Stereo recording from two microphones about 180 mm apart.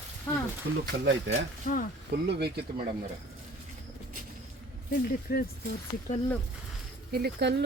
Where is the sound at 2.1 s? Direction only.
70° right (ahead or behind).